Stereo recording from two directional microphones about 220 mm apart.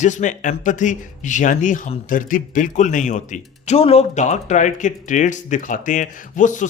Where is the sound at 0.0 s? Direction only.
35° left (ahead or behind).